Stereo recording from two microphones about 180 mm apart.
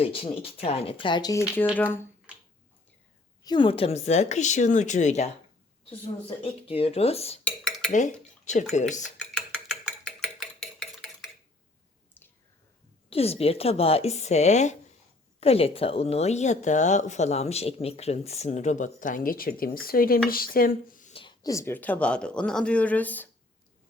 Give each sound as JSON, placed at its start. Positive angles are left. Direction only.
{"t": 0.0, "sound": "speech", "side_deg": 30}
{"t": 3.4, "sound": "speech", "side_deg": 25}
{"t": 6.4, "sound": "speech", "side_deg": 30}
{"t": 9.1, "sound": "a sound", "side_deg": 5}
{"t": 13.1, "sound": "speech", "side_deg": 35}
{"t": 21.1, "sound": "speech", "side_deg": 25}